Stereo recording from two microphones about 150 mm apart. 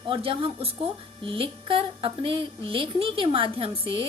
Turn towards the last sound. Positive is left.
turn(degrees=-35)  # may be behind; listen again after turning